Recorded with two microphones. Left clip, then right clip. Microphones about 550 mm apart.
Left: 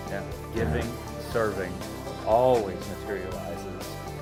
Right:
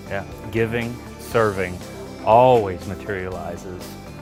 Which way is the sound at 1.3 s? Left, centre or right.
Right.